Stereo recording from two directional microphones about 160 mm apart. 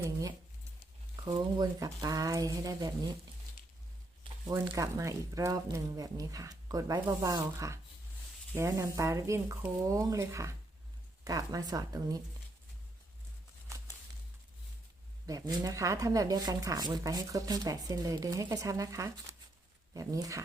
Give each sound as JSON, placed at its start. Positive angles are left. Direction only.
{"t": 0.0, "sound": "a sound", "side_deg": -20}
{"t": 1.2, "sound": "speech", "side_deg": -25}
{"t": 4.5, "sound": "speech", "side_deg": -15}
{"t": 15.3, "sound": "speech", "side_deg": -20}